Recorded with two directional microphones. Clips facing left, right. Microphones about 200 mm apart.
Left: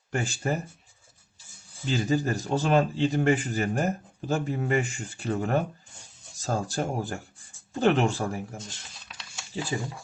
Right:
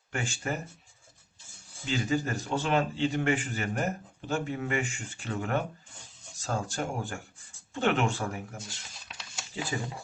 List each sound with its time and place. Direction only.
0.1 s speech: 35° left (ahead or behind)
1.8 s speech: 35° left (ahead or behind)
8.5 s a sound: 5° right (ahead or behind)
9.7 s speech: 25° left (ahead or behind)